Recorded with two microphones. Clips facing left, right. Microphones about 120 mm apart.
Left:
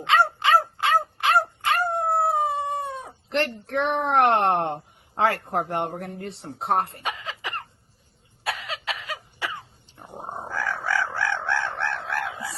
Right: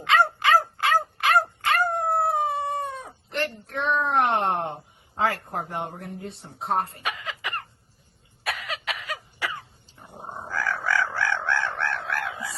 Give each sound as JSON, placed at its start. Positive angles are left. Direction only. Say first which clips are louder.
{"t": 0.0, "sound": "dog", "louder": "even", "side_deg": 25}
{"t": 2.2, "sound": "howl", "louder": "left 1 dB", "side_deg": 15}
{"t": 3.2, "sound": "a sound", "louder": "left 4 dB", "side_deg": 70}
{"t": 3.7, "sound": "speech", "louder": "even", "side_deg": 70}
{"t": 7.0, "sound": "cough", "louder": "even", "side_deg": 25}
{"t": 9.8, "sound": "dog", "louder": "left 3 dB", "side_deg": 65}
{"t": 10.5, "sound": "chicken", "louder": "right 1 dB", "side_deg": 25}